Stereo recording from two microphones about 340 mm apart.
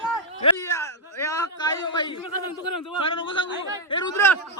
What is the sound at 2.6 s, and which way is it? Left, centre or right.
Speech, left.